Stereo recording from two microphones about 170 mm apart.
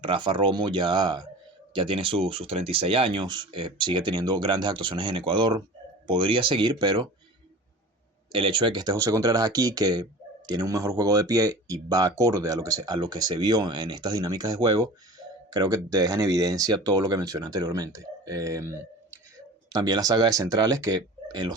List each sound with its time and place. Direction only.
0.0 s speech: 30° right (ahead or behind)
8.3 s speech: 30° right (ahead or behind)